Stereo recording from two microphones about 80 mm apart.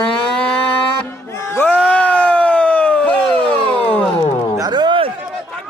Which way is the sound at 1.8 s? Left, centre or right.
Centre.